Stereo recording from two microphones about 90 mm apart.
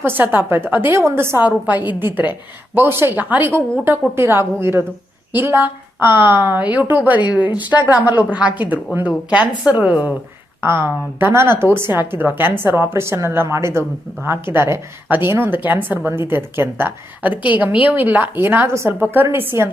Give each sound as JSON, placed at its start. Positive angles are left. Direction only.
{"t": 0.2, "sound": "a woman's voice", "side_deg": -20}
{"t": 10.6, "sound": "a woman's voice", "side_deg": -25}